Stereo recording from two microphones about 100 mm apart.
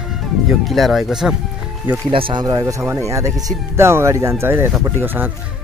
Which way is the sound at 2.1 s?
50° right (ahead or behind).